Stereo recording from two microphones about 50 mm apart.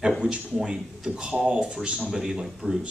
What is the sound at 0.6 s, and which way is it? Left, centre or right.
Speech, centre.